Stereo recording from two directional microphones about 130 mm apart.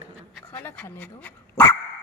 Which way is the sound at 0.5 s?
15° left (ahead or behind).